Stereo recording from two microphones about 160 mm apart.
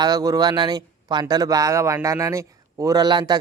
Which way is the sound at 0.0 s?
25° right (ahead or behind).